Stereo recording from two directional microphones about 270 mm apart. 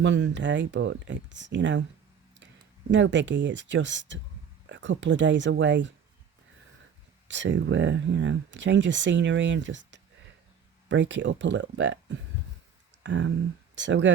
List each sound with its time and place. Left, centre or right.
0.0 s speech: right
2.9 s speech: right
7.3 s speech: right